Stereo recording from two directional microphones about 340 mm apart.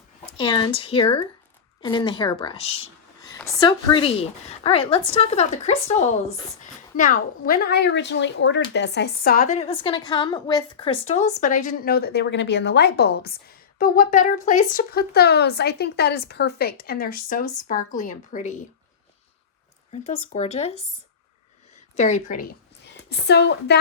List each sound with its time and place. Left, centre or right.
0.3 s a woman's voice: centre
20.2 s a woman's voice: centre
21.9 s a woman's voice: left